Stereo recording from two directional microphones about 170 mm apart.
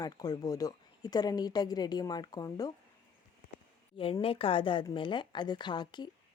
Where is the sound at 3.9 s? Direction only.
30° left (ahead or behind).